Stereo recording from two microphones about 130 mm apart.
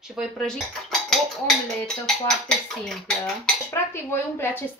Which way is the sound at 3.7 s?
20° left (ahead or behind).